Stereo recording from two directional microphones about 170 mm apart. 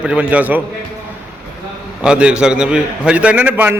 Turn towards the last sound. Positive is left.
turn(degrees=-10)  # may be behind; listen again after turning